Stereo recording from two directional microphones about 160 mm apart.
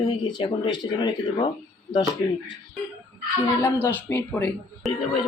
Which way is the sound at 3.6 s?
15° left (ahead or behind).